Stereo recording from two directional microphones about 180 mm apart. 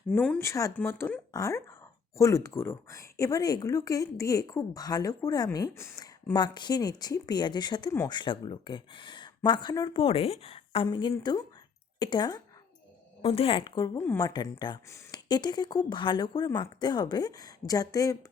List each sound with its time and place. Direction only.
0.1 s speech: 10° left (ahead or behind)